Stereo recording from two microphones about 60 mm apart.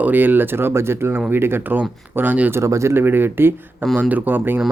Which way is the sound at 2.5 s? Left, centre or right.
Right.